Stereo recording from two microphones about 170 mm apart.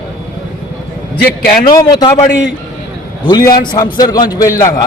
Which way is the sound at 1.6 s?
25° left (ahead or behind).